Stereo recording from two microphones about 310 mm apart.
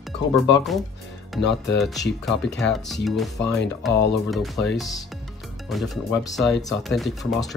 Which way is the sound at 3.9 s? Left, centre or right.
Left.